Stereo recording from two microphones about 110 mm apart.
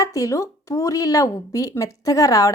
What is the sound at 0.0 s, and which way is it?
A woman's voice, 30° left (ahead or behind).